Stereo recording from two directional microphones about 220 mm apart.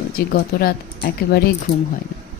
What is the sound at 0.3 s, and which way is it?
Speech, 45° left (ahead or behind).